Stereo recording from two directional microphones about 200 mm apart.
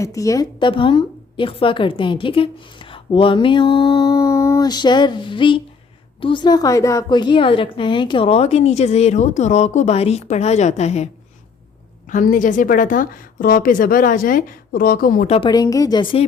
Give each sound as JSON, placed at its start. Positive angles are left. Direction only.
{"t": 0.0, "sound": "a woman's voice", "side_deg": 15}
{"t": 15.4, "sound": "a woman's voice", "side_deg": 20}